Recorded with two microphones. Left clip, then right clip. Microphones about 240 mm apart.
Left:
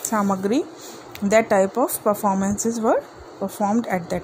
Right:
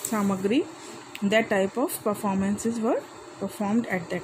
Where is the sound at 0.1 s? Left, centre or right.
Centre.